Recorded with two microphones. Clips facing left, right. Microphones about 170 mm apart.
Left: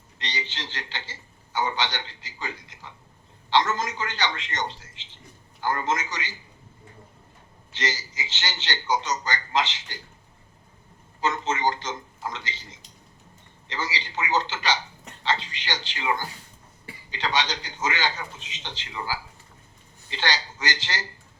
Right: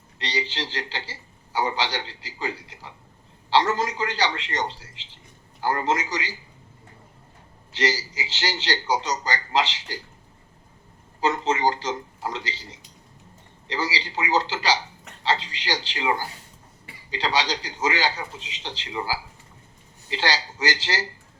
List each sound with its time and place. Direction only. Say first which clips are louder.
0.2 s a man's voice: right 6 dB; 35° right (ahead or behind)
7.8 s a man's voice: right 6 dB; 35° right (ahead or behind)
11.2 s a man's voice: right 3 dB; 35° right (ahead or behind)